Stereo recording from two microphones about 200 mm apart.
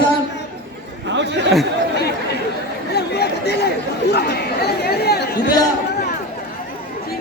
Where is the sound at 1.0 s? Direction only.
60° right (ahead or behind).